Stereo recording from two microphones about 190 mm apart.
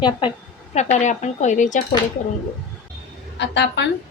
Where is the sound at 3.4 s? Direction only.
70° left (ahead or behind).